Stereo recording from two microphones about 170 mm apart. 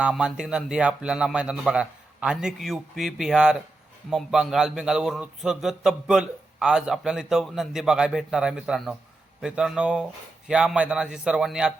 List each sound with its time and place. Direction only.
0.0 s a man's voice: 5° right (ahead or behind)